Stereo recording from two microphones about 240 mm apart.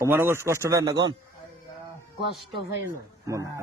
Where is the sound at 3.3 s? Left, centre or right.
Centre.